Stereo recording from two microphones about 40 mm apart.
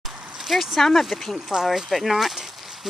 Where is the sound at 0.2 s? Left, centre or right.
Centre.